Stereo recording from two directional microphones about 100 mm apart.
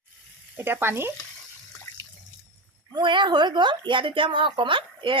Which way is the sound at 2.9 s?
50° right (ahead or behind).